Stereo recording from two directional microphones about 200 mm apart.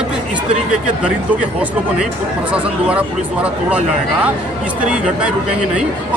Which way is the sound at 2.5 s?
5° right (ahead or behind).